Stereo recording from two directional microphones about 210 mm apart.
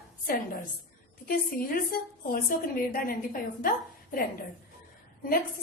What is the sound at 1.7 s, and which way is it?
A woman's voice, 40° left (ahead or behind).